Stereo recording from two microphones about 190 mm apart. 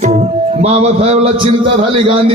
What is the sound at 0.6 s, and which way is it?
A man's voice, 35° right (ahead or behind).